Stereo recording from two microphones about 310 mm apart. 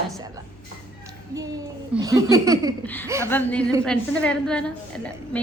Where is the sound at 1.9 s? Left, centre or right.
Centre.